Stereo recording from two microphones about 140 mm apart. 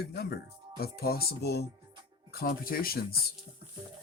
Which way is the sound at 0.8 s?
90° left.